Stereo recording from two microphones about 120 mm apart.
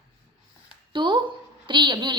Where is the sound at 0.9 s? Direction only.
40° right (ahead or behind).